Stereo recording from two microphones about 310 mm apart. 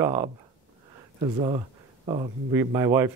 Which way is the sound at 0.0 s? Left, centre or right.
Centre.